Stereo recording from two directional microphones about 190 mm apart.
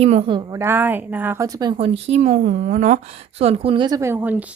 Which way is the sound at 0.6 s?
10° right (ahead or behind).